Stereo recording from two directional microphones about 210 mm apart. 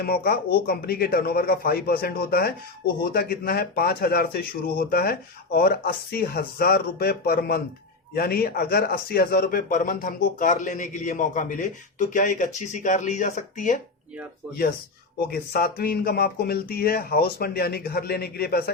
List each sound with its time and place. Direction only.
0.0 s speech: 45° left (ahead or behind)
15.3 s speech: 45° left (ahead or behind)